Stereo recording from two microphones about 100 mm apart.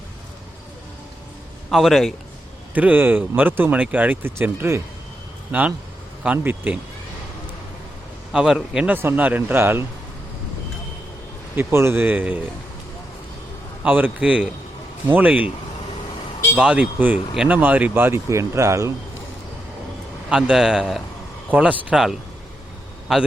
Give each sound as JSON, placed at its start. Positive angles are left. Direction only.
{"t": 1.7, "sound": "speech", "side_deg": 0}
{"t": 2.7, "sound": "speech", "side_deg": -15}
{"t": 8.3, "sound": "speech", "side_deg": -10}
{"t": 11.5, "sound": "speech", "side_deg": -25}
{"t": 13.8, "sound": "speech", "side_deg": -15}
{"t": 16.6, "sound": "speech", "side_deg": -10}
{"t": 20.3, "sound": "speech", "side_deg": -5}